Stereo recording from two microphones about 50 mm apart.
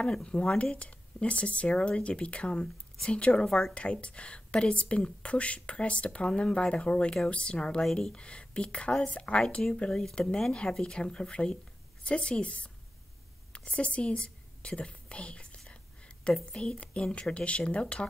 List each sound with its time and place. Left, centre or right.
0.1 s speech: centre
2.5 s speech: centre
3.4 s a woman's voice: centre
3.7 s speech: left
7.8 s speech: centre
8.1 s speech: left
9.8 s speech: centre
13.7 s whispering: left
16.5 s speech: centre